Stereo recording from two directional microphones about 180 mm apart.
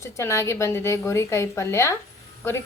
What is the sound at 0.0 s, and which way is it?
A woman's voice, 15° left (ahead or behind).